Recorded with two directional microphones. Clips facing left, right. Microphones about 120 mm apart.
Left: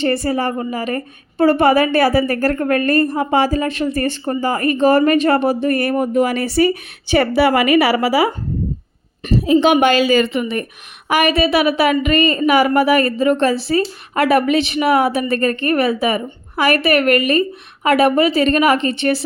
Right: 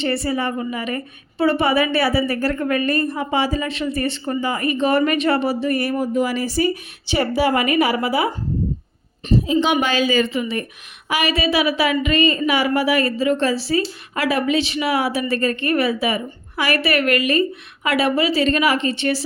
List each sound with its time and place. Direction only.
0.0 s a woman's voice: 45° left (ahead or behind); by 8.3 s 90° left
9.2 s a woman's voice: 65° left (ahead or behind)